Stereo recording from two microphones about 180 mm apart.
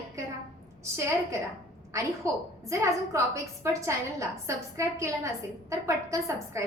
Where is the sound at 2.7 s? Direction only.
15° right (ahead or behind).